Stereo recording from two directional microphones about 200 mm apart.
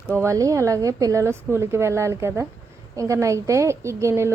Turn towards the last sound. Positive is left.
turn(degrees=-15)  # may be behind; listen again after turning